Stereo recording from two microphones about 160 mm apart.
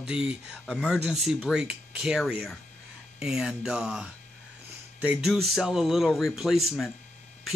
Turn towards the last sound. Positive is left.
turn(degrees=0)  # may be behind; listen again after turning